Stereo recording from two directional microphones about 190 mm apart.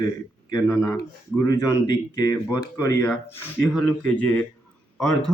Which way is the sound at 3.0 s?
10° left (ahead or behind).